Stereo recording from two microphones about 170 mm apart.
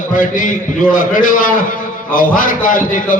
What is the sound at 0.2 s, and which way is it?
A man's voice, 50° left (ahead or behind).